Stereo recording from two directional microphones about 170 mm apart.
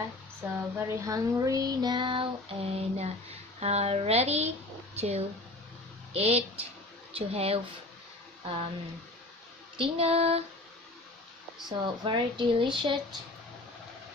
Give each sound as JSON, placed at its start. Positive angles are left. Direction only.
{"t": 0.4, "sound": "child singing", "side_deg": -10}
{"t": 3.5, "sound": "speech", "side_deg": -40}
{"t": 9.8, "sound": "speech", "side_deg": -35}
{"t": 11.8, "sound": "child singing", "side_deg": -25}